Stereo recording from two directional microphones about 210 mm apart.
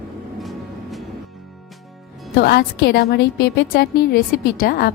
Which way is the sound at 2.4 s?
50° left (ahead or behind).